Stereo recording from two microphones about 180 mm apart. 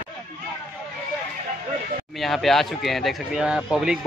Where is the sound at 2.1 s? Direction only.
Centre (ahead or behind).